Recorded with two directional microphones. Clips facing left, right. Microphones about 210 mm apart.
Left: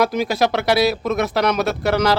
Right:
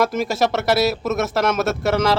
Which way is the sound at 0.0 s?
Centre (ahead or behind).